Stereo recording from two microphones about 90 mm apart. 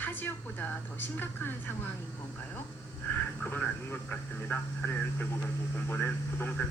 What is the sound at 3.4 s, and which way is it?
A woman's voice, 25° left (ahead or behind).